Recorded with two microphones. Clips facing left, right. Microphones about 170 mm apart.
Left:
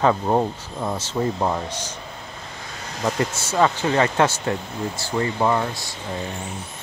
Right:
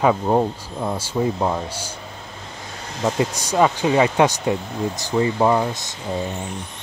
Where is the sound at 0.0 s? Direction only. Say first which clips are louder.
Right 2 dB; 5° right (ahead or behind).